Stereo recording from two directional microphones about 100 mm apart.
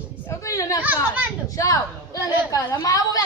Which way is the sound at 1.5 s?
35° left (ahead or behind).